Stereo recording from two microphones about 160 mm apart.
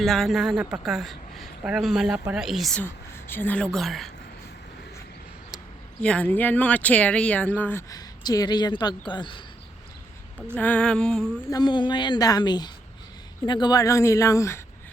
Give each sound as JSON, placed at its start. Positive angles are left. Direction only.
{"t": 0.0, "sound": "speech", "side_deg": 0}
{"t": 2.8, "sound": "speech", "side_deg": 15}
{"t": 6.0, "sound": "speech", "side_deg": 5}
{"t": 10.5, "sound": "speech", "side_deg": 10}
{"t": 11.5, "sound": "a woman's voice", "side_deg": 30}